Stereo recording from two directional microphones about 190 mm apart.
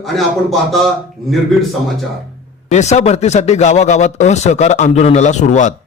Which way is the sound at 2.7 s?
35° left (ahead or behind).